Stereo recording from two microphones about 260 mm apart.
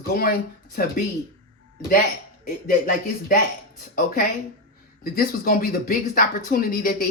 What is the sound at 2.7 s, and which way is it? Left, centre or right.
Speech, left.